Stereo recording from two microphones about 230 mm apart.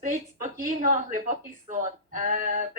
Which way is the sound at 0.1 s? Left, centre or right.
Right.